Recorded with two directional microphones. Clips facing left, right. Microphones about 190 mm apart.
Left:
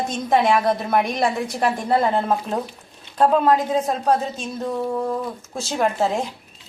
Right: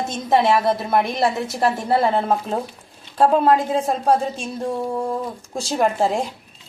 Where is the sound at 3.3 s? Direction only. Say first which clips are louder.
Right 1 dB; 5° right (ahead or behind).